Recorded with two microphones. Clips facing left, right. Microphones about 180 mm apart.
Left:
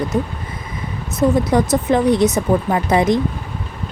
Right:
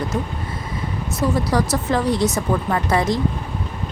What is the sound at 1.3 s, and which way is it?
Speech, 20° left (ahead or behind).